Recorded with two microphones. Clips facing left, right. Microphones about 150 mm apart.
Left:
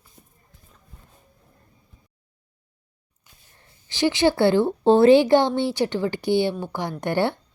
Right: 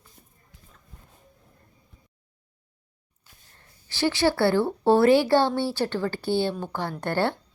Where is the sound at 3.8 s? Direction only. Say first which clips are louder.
Left 3 dB; 15° left (ahead or behind).